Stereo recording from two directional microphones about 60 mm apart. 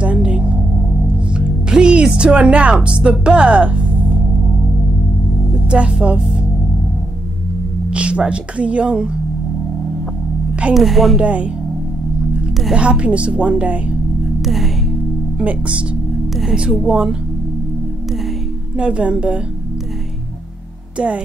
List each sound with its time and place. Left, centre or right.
0.0 s singing bowl: centre
1.3 s speech: centre
5.7 s speech: centre
7.9 s speech: centre
10.7 s a woman's voice: centre
11.1 s a woman's voice: right
12.7 s a woman's voice: centre
14.4 s music: centre
15.3 s a woman's voice: centre
16.8 s speech: centre
18.8 s a woman's voice: centre